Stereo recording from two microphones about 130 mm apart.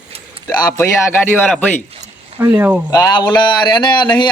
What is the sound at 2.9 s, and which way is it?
A man's voice, 25° left (ahead or behind).